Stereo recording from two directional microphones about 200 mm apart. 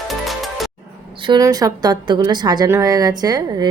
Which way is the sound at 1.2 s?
20° right (ahead or behind).